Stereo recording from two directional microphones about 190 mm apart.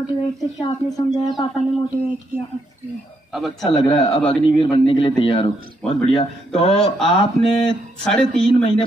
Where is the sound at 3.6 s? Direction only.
25° left (ahead or behind).